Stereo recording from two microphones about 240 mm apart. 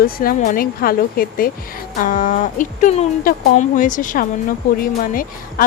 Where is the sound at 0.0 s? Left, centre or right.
Left.